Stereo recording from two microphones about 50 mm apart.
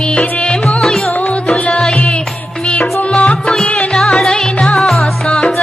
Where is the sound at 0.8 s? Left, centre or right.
Centre.